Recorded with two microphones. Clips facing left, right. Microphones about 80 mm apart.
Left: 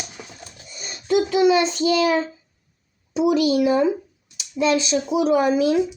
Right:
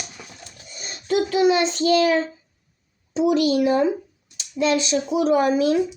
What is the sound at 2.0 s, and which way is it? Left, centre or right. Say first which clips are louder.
A child's voice: even; centre.